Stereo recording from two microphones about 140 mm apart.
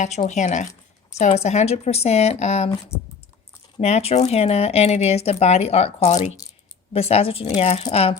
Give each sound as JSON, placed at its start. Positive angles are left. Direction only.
{"t": 0.0, "sound": "speech", "side_deg": 60}
{"t": 3.8, "sound": "speech", "side_deg": 50}